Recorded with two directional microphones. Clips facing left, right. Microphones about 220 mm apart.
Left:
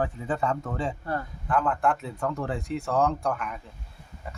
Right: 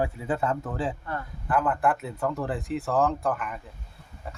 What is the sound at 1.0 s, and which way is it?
Speech, 35° left (ahead or behind).